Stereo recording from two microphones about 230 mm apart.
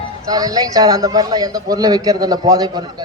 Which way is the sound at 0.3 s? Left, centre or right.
Centre.